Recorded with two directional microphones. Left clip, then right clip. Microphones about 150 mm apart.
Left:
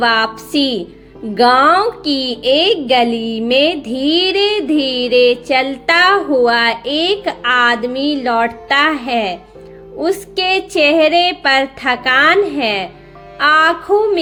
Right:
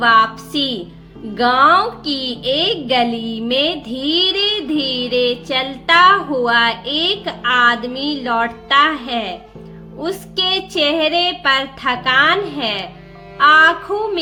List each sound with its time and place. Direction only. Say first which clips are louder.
0.0 s speech: right 2 dB; 25° left (ahead or behind)